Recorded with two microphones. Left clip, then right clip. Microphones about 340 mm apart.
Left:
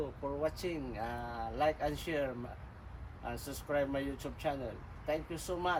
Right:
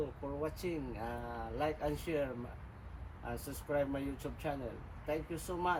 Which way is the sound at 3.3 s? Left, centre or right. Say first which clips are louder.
Left 1 dB; centre.